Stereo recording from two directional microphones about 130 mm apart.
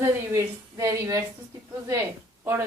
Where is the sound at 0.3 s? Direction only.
25° right (ahead or behind).